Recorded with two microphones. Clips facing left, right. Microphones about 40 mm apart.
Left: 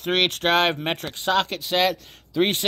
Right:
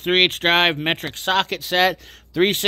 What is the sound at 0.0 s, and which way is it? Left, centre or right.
Speech, right.